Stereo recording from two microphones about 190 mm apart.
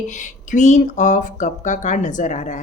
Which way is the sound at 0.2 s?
40° left (ahead or behind).